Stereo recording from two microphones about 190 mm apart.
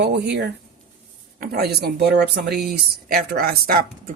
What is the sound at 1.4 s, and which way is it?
Speech, 50° right (ahead or behind).